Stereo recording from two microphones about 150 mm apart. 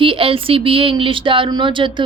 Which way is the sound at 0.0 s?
35° right (ahead or behind).